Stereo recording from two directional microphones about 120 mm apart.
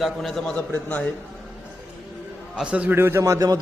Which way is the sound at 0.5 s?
15° left (ahead or behind).